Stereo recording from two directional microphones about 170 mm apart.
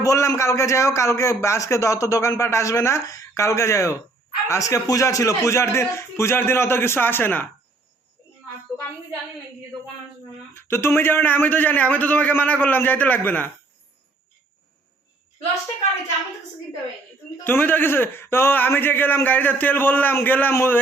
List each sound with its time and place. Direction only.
0.0 s a man's voice: 20° left (ahead or behind)
10.5 s a man's voice: 15° left (ahead or behind)
17.4 s a man's voice: 10° left (ahead or behind)